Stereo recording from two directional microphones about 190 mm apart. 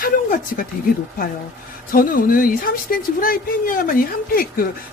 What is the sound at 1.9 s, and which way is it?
Speech, 50° left (ahead or behind).